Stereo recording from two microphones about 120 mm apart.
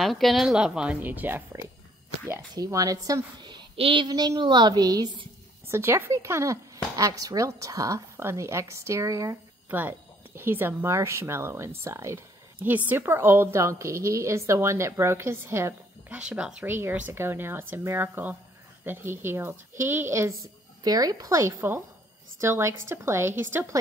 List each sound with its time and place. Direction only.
0.0 s a woman's voice: centre (ahead or behind); by 4.1 s 50° right (ahead or behind)
4.1 s a woman's voice: 35° right (ahead or behind)
5.7 s speech: 20° right (ahead or behind)
9.7 s speech: 15° right (ahead or behind)
16.2 s speech: 5° right (ahead or behind)